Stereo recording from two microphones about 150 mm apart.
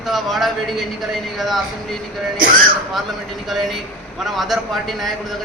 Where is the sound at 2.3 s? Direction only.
70° right (ahead or behind).